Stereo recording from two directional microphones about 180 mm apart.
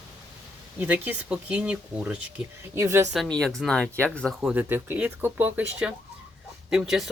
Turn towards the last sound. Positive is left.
turn(degrees=0)  # may be behind; listen again after turning